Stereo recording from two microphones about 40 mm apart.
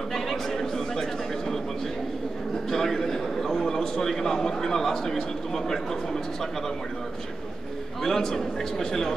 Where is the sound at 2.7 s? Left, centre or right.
Centre.